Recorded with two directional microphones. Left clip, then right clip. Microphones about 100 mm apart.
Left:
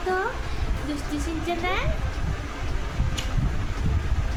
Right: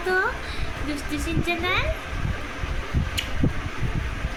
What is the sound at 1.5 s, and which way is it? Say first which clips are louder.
Speech: right 3 dB; 45° right (ahead or behind).